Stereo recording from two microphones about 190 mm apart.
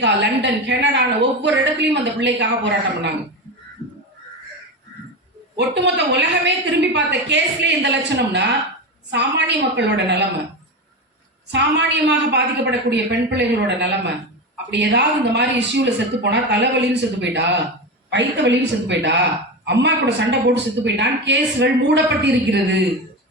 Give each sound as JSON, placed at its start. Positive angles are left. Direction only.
{"t": 0.0, "sound": "a woman's voice", "side_deg": -65}
{"t": 5.5, "sound": "a man's voice", "side_deg": -65}
{"t": 11.5, "sound": "a man's voice", "side_deg": -65}